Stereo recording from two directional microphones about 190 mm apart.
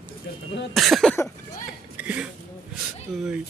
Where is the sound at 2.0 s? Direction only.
5° right (ahead or behind).